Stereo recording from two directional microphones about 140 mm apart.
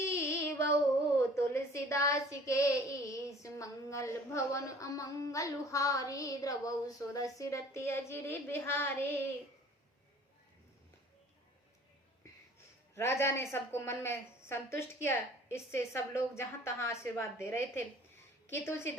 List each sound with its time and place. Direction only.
0.0 s speech: 20° left (ahead or behind)
13.0 s a woman's voice: 15° left (ahead or behind)